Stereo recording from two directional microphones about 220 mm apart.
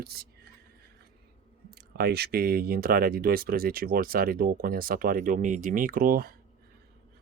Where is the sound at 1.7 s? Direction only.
45° right (ahead or behind).